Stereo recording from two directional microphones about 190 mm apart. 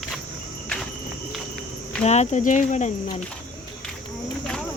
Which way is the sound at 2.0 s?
35° left (ahead or behind).